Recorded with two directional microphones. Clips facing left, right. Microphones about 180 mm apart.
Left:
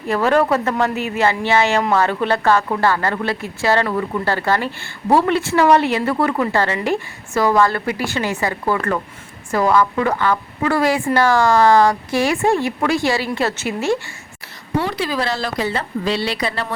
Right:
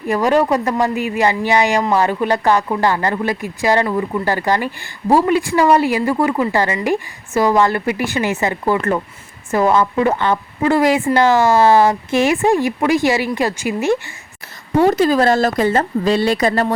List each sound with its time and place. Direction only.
0.1 s speech: 15° right (ahead or behind)
14.8 s speech: 45° right (ahead or behind)